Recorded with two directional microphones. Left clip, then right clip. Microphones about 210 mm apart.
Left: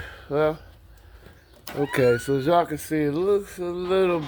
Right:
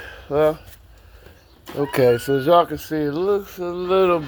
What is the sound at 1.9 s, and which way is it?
Speech, 5° right (ahead or behind).